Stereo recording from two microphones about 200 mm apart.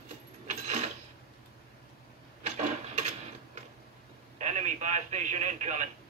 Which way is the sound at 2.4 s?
35° right (ahead or behind).